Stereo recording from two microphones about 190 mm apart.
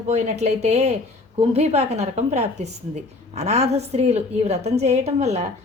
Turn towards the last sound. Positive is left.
turn(degrees=-35)  # may be behind; listen again after turning